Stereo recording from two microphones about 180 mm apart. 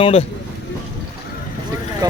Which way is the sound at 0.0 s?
35° left (ahead or behind).